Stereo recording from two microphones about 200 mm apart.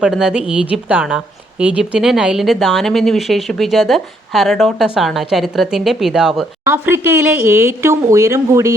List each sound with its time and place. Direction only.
0.0 s a woman's voice: 5° right (ahead or behind)